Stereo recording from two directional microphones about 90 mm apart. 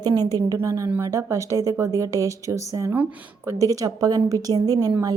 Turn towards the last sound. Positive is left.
turn(degrees=-45)  # may be behind; listen again after turning